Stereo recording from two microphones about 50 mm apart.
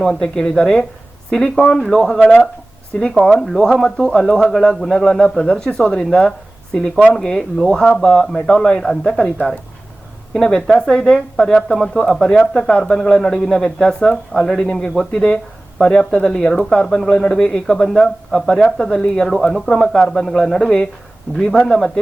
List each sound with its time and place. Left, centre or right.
0.2 s speech: centre